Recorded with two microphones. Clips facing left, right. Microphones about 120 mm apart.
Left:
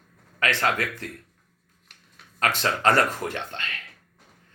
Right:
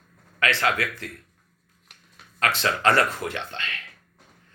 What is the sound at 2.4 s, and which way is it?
Speech, 40° left (ahead or behind).